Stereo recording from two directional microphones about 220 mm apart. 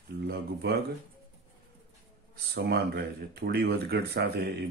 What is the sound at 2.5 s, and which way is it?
Speech, 45° right (ahead or behind).